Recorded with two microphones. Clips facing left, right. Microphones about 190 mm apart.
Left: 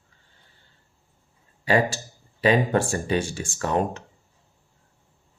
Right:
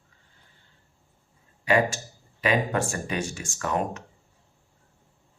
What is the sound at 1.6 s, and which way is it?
Speech, 30° left (ahead or behind).